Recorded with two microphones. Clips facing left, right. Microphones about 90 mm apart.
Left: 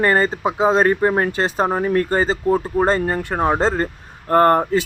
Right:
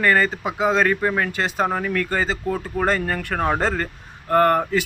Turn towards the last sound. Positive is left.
turn(degrees=35)  # may be behind; listen again after turning